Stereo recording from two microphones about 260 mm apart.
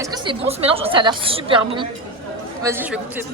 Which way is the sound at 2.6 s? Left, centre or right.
Centre.